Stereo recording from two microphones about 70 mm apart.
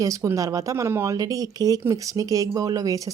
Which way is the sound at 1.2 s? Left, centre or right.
Right.